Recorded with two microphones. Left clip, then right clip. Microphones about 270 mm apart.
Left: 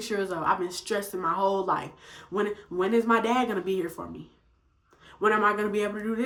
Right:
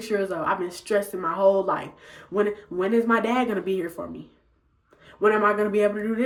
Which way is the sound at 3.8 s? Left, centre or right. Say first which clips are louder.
Right 3 dB; centre.